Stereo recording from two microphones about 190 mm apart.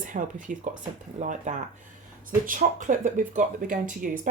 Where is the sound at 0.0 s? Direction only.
45° right (ahead or behind).